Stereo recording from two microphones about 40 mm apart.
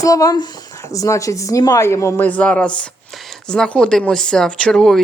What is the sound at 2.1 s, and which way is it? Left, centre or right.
Owl, left.